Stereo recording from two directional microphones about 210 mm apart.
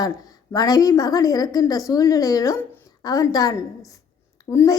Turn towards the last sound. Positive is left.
turn(degrees=15)  # may be behind; listen again after turning